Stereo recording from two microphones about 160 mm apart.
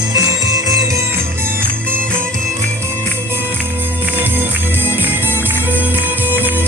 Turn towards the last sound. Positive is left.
turn(degrees=-10)  # may be behind; listen again after turning